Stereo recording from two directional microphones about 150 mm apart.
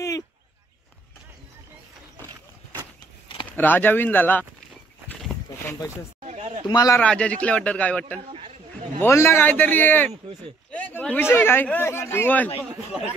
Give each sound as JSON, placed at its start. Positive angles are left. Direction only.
{"t": 3.5, "sound": "a man's voice", "side_deg": 10}
{"t": 6.2, "sound": "a sound", "side_deg": -45}
{"t": 6.7, "sound": "a man's voice", "side_deg": 25}
{"t": 7.0, "sound": "a man's voice", "side_deg": 5}
{"t": 12.9, "sound": "speech", "side_deg": -5}